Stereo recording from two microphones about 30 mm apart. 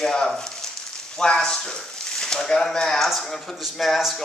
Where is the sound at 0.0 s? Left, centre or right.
Left.